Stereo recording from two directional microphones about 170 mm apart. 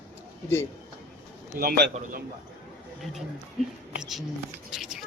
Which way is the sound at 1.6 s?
60° right (ahead or behind).